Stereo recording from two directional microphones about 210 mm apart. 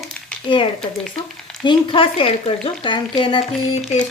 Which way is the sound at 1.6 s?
25° left (ahead or behind).